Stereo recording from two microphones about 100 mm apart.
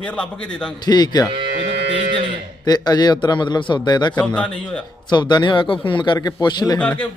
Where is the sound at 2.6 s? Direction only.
40° left (ahead or behind).